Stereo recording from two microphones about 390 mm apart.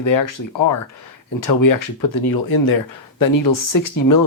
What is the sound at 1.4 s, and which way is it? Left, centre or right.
Speech, left.